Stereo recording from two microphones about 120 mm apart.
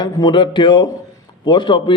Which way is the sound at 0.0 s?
35° left (ahead or behind).